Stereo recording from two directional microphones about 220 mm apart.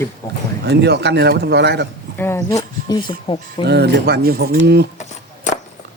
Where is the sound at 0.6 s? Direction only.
50° right (ahead or behind).